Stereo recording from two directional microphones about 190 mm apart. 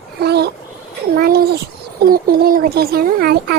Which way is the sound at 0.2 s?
60° right (ahead or behind).